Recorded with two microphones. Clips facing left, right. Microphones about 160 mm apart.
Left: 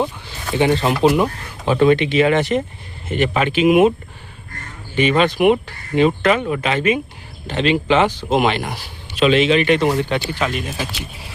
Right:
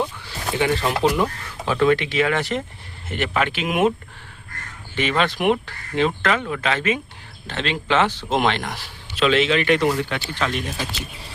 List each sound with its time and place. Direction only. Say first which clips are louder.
0.3 s speech: left 5 dB; 25° left (ahead or behind)
4.9 s speech: left 6 dB; 15° left (ahead or behind)
10.3 s speech: left 3 dB; 5° left (ahead or behind)